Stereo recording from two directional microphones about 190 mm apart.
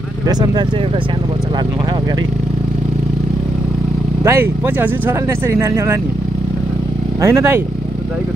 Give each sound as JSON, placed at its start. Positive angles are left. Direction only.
{"t": 0.3, "sound": "speech", "side_deg": -20}
{"t": 4.2, "sound": "speech", "side_deg": -15}
{"t": 7.2, "sound": "speech", "side_deg": -15}